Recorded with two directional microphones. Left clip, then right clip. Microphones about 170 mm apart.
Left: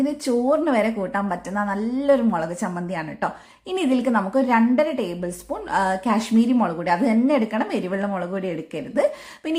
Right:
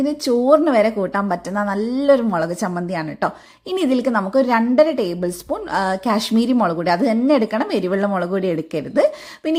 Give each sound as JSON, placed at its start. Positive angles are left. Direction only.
{"t": 0.0, "sound": "a woman's voice", "side_deg": -25}